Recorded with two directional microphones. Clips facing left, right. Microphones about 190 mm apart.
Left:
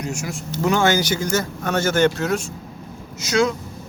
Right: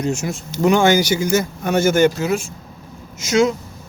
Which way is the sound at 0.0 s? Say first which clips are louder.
Right 6 dB; 25° right (ahead or behind).